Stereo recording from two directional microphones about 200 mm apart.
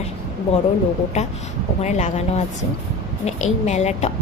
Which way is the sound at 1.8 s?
35° left (ahead or behind).